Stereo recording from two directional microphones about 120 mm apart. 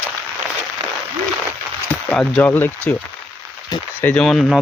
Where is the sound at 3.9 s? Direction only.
15° left (ahead or behind).